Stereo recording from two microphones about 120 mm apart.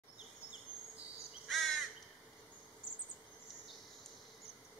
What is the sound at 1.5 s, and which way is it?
Crow, centre (ahead or behind).